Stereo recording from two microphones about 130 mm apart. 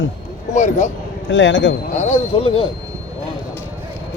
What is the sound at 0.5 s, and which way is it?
Speech, 70° left (ahead or behind).